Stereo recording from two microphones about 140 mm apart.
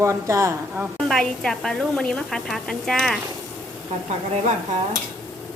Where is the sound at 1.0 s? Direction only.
5° left (ahead or behind).